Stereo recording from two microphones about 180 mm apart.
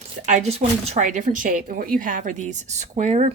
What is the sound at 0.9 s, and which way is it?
Speech, 40° right (ahead or behind).